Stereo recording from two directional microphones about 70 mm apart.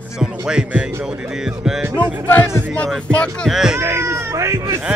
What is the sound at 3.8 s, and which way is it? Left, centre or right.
Speech, right.